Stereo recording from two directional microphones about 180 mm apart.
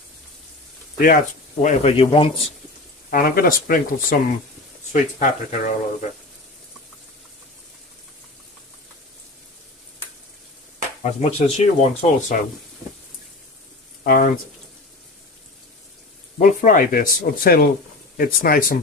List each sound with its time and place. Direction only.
0.9 s speech: 50° left (ahead or behind); by 2.3 s 30° left (ahead or behind)
3.1 s speech: 55° left (ahead or behind)
11.0 s speech: 40° left (ahead or behind)
14.0 s speech: 55° left (ahead or behind)
16.3 s speech: 45° left (ahead or behind)